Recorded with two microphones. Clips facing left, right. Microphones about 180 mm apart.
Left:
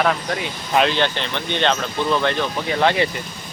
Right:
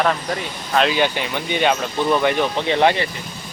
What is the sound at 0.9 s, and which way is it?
Speech, 10° right (ahead or behind).